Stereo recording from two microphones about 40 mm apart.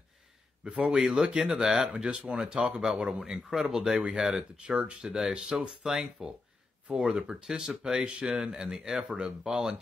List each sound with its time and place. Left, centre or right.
0.7 s speech: right; by 3.9 s centre
3.9 s speech: right
4.2 s speech: centre
4.6 s speech: right
5.0 s speech: centre
5.9 s speech: centre
6.9 s speech: centre
9.1 s speech: right
9.5 s speech: centre